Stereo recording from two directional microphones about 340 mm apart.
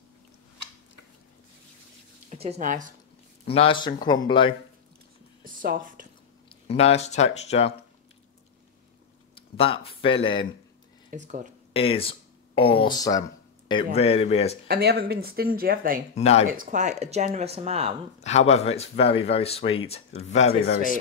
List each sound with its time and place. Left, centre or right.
2.2 s speech: centre
3.4 s speech: centre
5.4 s a sound: right
6.5 s speech: centre
9.3 s speech: centre
11.1 s speech: right
11.7 s speech: centre
14.7 s speech: right
16.2 s speech: centre
16.4 s speech: right
18.2 s speech: centre